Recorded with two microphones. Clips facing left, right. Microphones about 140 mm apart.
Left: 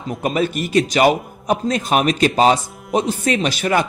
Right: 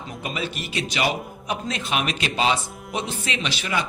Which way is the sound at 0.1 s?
50° left (ahead or behind).